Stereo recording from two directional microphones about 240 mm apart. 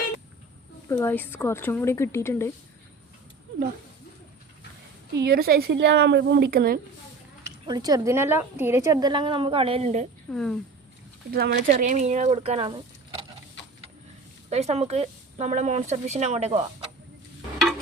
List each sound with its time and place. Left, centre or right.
0.9 s a woman's voice: centre
5.1 s speech: right
7.7 s a woman's voice: centre
10.2 s a woman's voice: centre
11.3 s speech: right; by 13.2 s centre
14.5 s speech: right